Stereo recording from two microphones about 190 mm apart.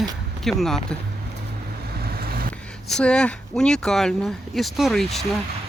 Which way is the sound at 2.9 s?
5° left (ahead or behind).